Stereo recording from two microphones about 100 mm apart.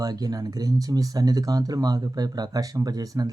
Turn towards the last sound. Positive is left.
turn(degrees=-40)  # may be behind; listen again after turning